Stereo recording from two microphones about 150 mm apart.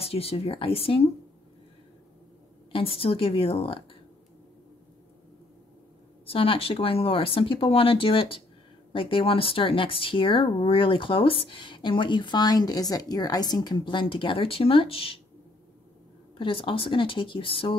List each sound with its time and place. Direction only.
0.0 s speech: 40° left (ahead or behind)
2.7 s speech: 40° left (ahead or behind)
6.2 s speech: 40° left (ahead or behind)
16.3 s speech: 35° left (ahead or behind)